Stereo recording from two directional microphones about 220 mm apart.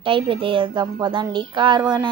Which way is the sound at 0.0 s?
25° right (ahead or behind).